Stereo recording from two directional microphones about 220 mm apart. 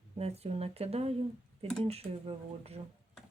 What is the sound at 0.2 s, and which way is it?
Speech, 30° right (ahead or behind).